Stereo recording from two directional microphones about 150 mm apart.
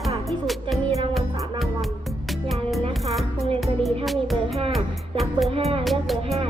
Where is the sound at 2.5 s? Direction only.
Centre (ahead or behind).